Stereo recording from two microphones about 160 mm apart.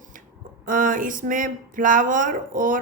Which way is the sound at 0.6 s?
55° right (ahead or behind).